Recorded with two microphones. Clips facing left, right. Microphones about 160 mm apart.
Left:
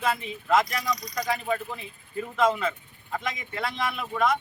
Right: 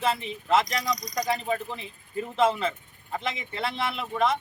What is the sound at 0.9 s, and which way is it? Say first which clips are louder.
Speech: right 2 dB; 45° right (ahead or behind).